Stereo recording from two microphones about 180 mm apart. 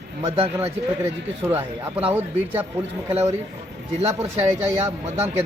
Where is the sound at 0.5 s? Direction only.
15° right (ahead or behind).